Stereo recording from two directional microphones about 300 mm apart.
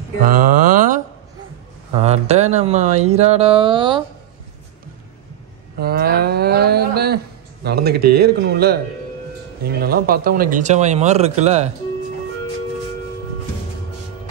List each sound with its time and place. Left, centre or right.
0.2 s a sound: right
2.0 s speech: right
5.8 s speech: right